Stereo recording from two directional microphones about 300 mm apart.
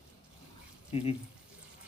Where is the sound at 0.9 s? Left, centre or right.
Centre.